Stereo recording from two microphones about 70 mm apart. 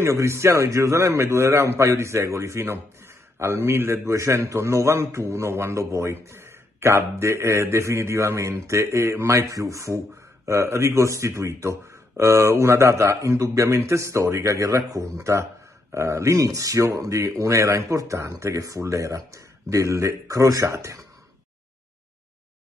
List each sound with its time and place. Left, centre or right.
0.0 s a man's voice: right